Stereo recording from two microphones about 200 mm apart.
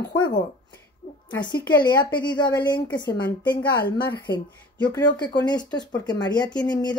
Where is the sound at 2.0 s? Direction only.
20° left (ahead or behind).